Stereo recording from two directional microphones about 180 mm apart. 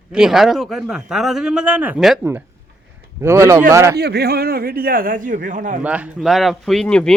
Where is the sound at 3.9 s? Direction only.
65° right (ahead or behind); by 5.8 s 45° right (ahead or behind).